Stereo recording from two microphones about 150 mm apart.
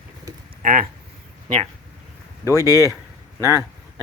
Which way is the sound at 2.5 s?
25° right (ahead or behind).